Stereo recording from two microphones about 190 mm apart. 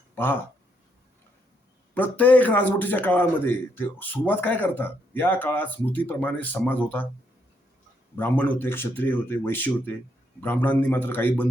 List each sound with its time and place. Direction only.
2.0 s a man's voice: 10° left (ahead or behind)
8.1 s a man's voice: 10° left (ahead or behind)